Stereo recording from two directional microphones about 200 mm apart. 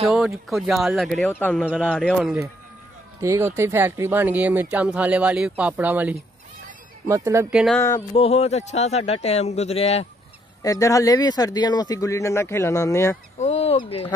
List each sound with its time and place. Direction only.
0.5 s speech: centre (ahead or behind)
1.6 s speech: 5° right (ahead or behind)
1.9 s speech: 5° left (ahead or behind)
3.2 s speech: 10° right (ahead or behind)
8.1 s a man's voice: 30° left (ahead or behind)
10.6 s speech: 15° left (ahead or behind)
13.4 s speech: 35° left (ahead or behind)